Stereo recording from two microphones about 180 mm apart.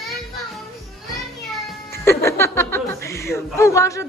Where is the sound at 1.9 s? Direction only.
15° left (ahead or behind).